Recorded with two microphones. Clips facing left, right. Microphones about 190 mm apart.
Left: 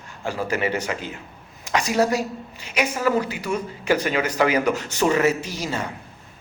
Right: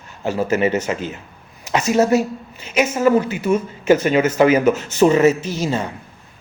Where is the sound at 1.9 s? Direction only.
20° right (ahead or behind).